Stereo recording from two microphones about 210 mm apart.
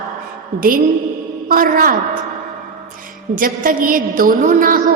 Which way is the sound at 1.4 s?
40° right (ahead or behind).